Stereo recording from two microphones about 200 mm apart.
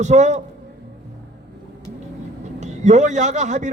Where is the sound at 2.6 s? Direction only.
35° right (ahead or behind).